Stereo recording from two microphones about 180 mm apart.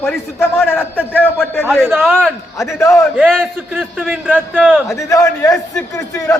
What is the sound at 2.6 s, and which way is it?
Speech, 15° left (ahead or behind).